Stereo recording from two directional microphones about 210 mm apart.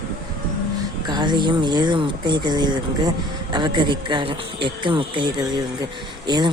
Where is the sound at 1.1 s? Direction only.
20° right (ahead or behind).